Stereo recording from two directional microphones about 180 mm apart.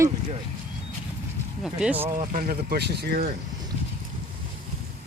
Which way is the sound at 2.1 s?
50° right (ahead or behind).